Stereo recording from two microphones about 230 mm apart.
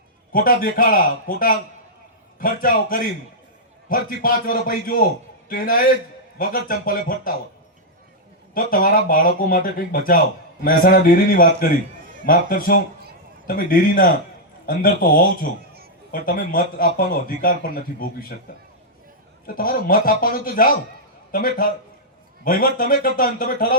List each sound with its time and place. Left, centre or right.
0.3 s a man's voice: left
8.5 s a man's voice: left
19.5 s a man's voice: left